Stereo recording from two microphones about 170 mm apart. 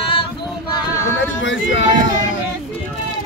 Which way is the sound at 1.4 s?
90° left.